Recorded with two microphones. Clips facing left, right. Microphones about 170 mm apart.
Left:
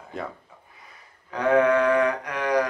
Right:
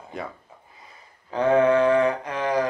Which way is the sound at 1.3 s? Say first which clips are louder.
Right 1 dB; 25° right (ahead or behind).